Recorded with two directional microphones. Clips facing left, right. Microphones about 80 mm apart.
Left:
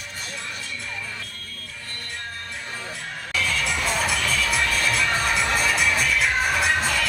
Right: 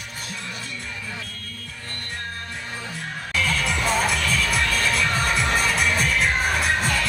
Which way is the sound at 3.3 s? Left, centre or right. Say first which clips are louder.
Right 1 dB; right.